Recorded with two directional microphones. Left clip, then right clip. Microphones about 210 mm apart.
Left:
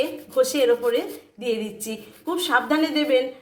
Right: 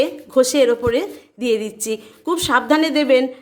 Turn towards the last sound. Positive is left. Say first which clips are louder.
# right 6 dB
turn(degrees=-50)  # may be behind; listen again after turning